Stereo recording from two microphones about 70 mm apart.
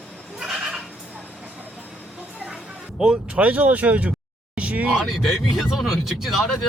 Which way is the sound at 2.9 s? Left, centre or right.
Centre.